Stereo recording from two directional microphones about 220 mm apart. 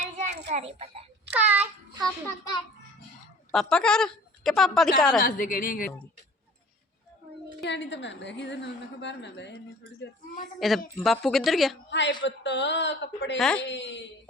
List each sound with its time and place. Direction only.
0.0 s a sound: 30° right (ahead or behind)
0.5 s a child's voice: 30° right (ahead or behind)
1.3 s babbling: 5° right (ahead or behind)
2.2 s a child's voice: 15° left (ahead or behind)
3.5 s a woman's voice: centre (ahead or behind)
5.2 s a woman's voice: 40° left (ahead or behind)
7.6 s a woman's voice: 55° left (ahead or behind)
10.6 s a woman's voice: centre (ahead or behind)
11.9 s a woman's voice: 55° left (ahead or behind)